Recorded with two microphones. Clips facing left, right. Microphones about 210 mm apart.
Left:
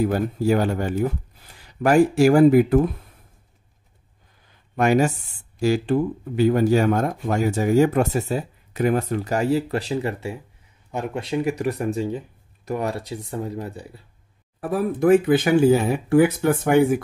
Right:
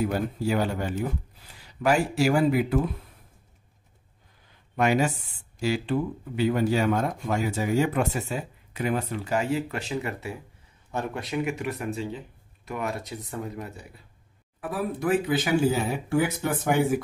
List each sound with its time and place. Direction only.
0.0 s speech: 45° left (ahead or behind)
4.7 s speech: 45° left (ahead or behind)
10.9 s speech: 15° left (ahead or behind)
11.2 s speech: 35° left (ahead or behind); by 16.7 s 60° left (ahead or behind)